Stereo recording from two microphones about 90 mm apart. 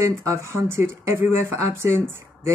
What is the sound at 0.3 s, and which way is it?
Speech, 30° right (ahead or behind).